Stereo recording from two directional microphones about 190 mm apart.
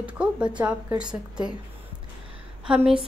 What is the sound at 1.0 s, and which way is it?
Speech, 20° right (ahead or behind).